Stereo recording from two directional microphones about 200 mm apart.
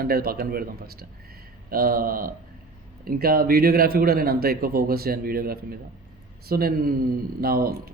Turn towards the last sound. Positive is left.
turn(degrees=-50)  # may be behind; listen again after turning